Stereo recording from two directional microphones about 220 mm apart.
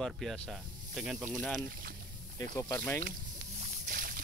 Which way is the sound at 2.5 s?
15° left (ahead or behind).